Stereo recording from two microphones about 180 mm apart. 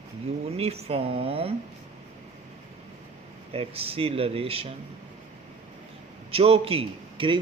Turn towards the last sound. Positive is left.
turn(degrees=-30)  # may be behind; listen again after turning